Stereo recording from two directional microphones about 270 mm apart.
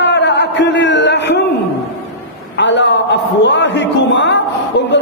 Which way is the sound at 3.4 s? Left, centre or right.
Left.